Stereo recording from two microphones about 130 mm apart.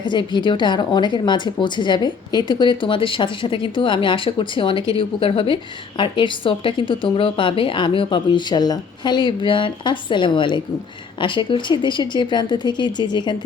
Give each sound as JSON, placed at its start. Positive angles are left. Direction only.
{"t": 0.0, "sound": "a woman's voice", "side_deg": 35}